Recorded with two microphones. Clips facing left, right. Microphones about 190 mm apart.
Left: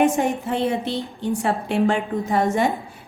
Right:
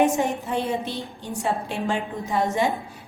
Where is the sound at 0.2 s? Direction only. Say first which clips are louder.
Left 3 dB; 60° left (ahead or behind).